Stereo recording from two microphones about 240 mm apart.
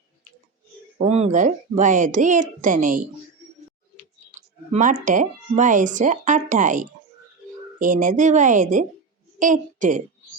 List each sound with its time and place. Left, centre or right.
0.9 s speech: right
4.4 s a sound: right
5.0 s a woman's voice: right